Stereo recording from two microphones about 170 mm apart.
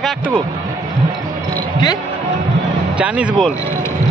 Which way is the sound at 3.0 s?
10° right (ahead or behind).